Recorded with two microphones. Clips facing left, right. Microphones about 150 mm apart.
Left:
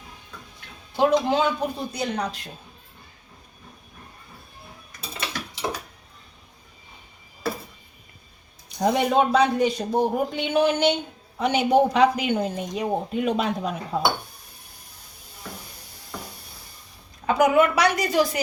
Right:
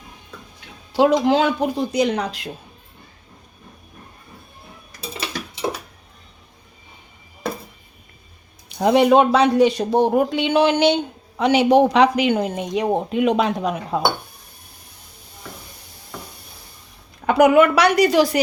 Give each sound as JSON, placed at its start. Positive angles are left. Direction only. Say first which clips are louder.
{"t": 0.9, "sound": "speech", "louder": "right 4 dB", "side_deg": -90}
{"t": 8.7, "sound": "speech", "louder": "right 7 dB", "side_deg": -75}
{"t": 17.2, "sound": "a woman's voice", "louder": "right 5 dB", "side_deg": -70}